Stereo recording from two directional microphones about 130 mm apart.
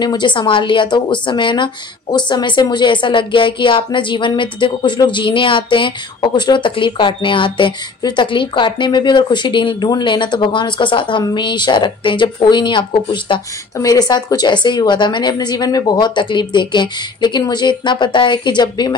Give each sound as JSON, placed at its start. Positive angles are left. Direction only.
{"t": 0.0, "sound": "a woman's voice", "side_deg": 35}